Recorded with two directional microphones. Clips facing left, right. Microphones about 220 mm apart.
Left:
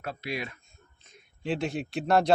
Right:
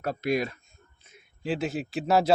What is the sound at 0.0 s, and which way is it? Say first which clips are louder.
Speech: right 8 dB; 45° right (ahead or behind).